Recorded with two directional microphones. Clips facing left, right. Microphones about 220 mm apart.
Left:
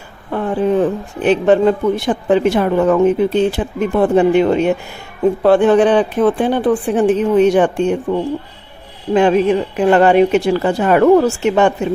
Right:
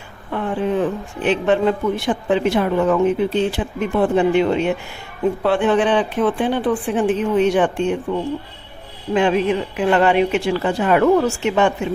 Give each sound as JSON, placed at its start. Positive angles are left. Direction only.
{"t": 0.3, "sound": "a woman's voice", "side_deg": 40}
{"t": 9.1, "sound": "a woman's voice", "side_deg": 40}